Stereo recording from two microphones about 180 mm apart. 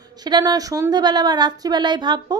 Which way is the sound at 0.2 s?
25° right (ahead or behind).